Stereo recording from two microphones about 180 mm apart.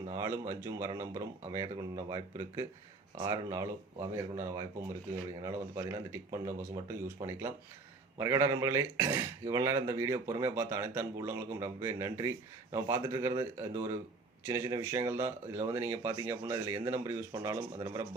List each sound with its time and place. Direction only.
0.2 s speech: 15° right (ahead or behind)